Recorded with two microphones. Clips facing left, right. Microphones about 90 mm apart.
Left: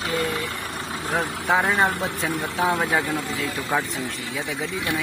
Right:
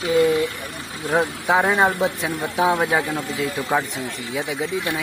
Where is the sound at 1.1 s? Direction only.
10° right (ahead or behind).